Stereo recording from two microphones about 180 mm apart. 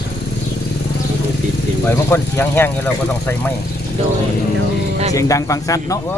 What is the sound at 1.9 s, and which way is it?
Speech, 10° left (ahead or behind).